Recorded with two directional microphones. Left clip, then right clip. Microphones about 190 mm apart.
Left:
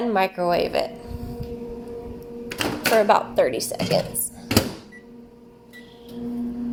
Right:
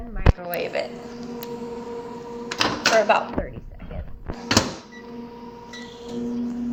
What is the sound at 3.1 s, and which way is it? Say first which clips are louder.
Speech: left 3 dB; 70° left (ahead or behind).